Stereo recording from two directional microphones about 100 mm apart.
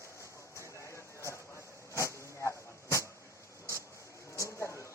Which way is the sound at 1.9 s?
30° left (ahead or behind).